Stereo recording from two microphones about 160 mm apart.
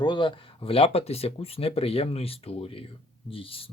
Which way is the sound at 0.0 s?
30° left (ahead or behind).